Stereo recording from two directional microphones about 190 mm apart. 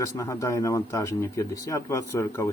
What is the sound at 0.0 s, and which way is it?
Speech, 15° left (ahead or behind).